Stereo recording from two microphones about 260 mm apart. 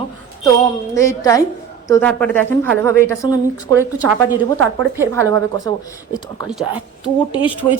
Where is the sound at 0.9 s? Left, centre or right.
Centre.